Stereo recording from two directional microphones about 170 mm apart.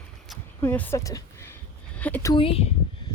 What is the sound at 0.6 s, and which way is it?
Speech, 10° left (ahead or behind).